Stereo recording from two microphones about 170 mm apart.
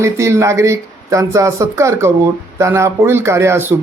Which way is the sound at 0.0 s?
15° right (ahead or behind).